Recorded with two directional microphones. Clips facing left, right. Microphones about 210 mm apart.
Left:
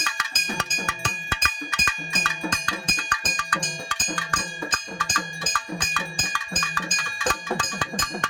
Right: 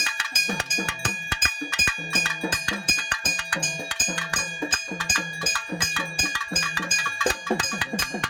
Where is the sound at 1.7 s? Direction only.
10° right (ahead or behind).